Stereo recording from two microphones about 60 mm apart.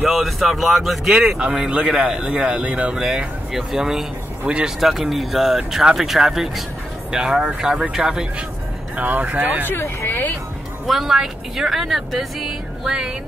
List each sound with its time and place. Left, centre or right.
0.0 s speech: centre
1.1 s speech: centre
4.7 s speech: centre
8.9 s speech: right
9.7 s speech: left
10.9 s speech: centre
12.4 s music: centre